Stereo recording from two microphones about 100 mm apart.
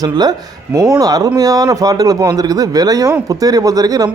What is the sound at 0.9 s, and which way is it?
A man's voice, 40° right (ahead or behind).